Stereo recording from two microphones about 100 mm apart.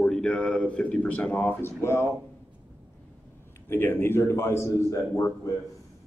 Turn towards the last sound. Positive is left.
turn(degrees=30)  # may be behind; listen again after turning